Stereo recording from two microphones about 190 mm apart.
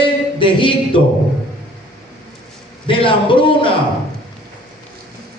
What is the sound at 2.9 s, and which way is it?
Speech, 25° left (ahead or behind).